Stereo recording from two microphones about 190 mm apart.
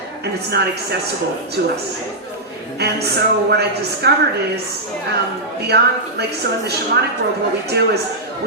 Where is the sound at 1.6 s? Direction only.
55° right (ahead or behind).